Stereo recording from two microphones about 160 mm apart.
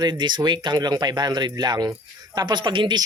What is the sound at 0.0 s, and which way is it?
Speech, 25° right (ahead or behind).